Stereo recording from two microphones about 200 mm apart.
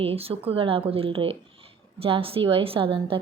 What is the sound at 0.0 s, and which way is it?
A woman's voice, 30° right (ahead or behind).